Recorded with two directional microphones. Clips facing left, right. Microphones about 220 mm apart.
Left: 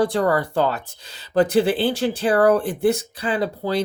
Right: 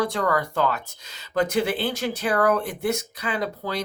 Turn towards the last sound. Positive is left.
turn(degrees=30)  # may be behind; listen again after turning